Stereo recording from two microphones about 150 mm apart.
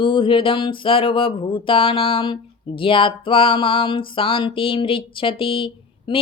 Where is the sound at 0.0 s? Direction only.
35° left (ahead or behind).